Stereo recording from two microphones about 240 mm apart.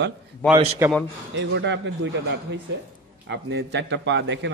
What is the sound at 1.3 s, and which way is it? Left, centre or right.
Speech, right.